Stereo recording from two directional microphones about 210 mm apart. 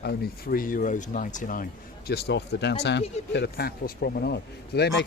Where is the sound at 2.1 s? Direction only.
50° left (ahead or behind).